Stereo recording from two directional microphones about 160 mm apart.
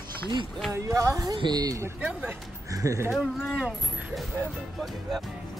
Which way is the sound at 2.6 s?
20° right (ahead or behind).